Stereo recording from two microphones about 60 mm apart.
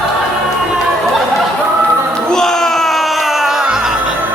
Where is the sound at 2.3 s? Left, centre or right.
Centre.